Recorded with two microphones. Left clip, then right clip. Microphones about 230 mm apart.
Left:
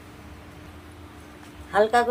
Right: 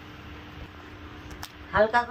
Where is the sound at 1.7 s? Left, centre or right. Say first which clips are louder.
Left 2 dB; left.